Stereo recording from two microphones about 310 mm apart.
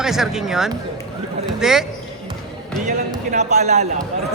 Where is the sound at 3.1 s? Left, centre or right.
Right.